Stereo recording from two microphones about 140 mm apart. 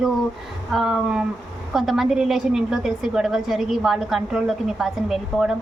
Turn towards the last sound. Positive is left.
turn(degrees=-5)  # may be behind; listen again after turning